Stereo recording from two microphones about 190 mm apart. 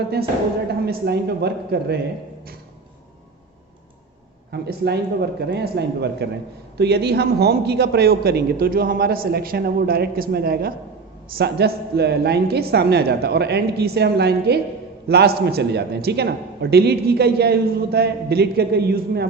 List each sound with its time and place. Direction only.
0.9 s a man's voice: 60° right (ahead or behind)
4.5 s a man's voice: 60° right (ahead or behind)